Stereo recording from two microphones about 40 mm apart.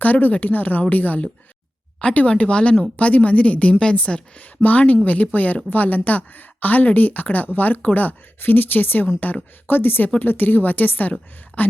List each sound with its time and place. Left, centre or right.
0.0 s a woman's voice: left
2.9 s a woman's voice: left